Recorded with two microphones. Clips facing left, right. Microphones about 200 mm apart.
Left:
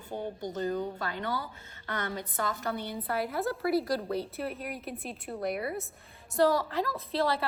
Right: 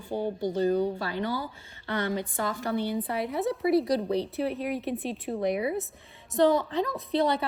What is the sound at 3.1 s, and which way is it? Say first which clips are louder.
A woman's voice: right 2 dB; centre (ahead or behind).